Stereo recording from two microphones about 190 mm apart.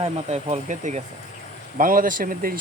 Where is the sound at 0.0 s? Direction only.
35° right (ahead or behind).